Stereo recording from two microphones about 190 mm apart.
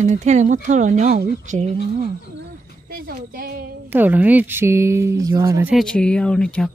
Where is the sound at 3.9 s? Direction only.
10° right (ahead or behind).